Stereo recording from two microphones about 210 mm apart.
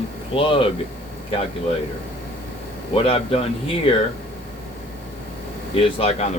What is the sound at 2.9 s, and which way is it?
Speech, 25° left (ahead or behind).